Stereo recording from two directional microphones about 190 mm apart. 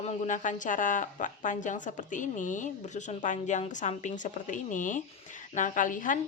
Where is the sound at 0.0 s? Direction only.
40° left (ahead or behind).